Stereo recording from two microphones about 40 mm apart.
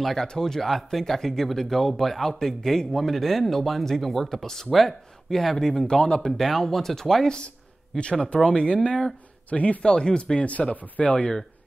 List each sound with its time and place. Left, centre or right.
0.0 s speech: centre
5.9 s speech: left
6.3 s speech: centre
7.2 s speech: left
9.5 s speech: left
9.8 s speech: left